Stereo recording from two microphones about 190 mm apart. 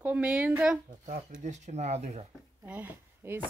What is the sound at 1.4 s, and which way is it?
Speech, 40° right (ahead or behind).